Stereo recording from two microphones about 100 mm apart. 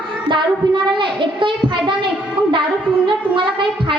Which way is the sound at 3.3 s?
55° right (ahead or behind).